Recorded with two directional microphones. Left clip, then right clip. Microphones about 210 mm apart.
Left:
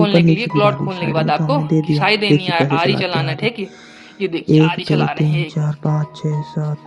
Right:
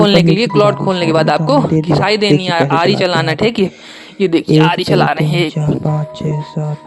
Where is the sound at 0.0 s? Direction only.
45° right (ahead or behind).